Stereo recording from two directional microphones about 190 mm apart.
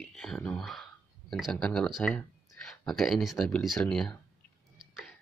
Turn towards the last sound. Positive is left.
turn(degrees=5)  # may be behind; listen again after turning